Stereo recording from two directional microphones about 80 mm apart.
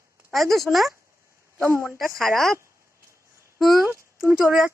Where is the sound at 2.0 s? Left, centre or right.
Centre.